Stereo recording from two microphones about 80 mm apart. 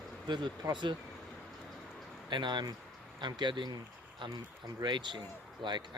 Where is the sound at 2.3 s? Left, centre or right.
Right.